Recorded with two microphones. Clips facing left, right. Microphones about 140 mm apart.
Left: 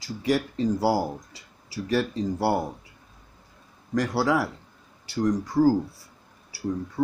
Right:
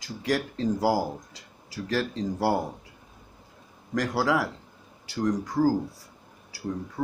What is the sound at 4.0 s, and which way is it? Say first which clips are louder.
Speech: left 2 dB; centre (ahead or behind).